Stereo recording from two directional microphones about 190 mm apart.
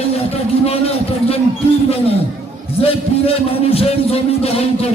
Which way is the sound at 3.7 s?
30° left (ahead or behind).